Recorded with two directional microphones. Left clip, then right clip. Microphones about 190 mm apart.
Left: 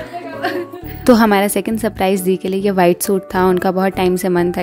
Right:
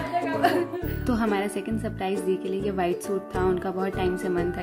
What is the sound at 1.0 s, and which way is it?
A woman's voice, 55° left (ahead or behind).